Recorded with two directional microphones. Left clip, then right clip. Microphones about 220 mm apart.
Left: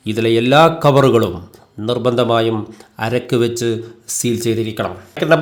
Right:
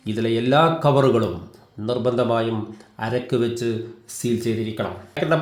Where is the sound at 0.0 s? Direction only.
35° left (ahead or behind).